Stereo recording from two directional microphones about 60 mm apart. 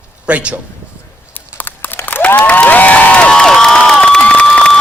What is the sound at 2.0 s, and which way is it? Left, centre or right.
Crowd, left.